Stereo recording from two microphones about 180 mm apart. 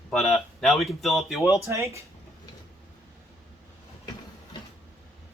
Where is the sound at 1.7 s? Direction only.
15° right (ahead or behind).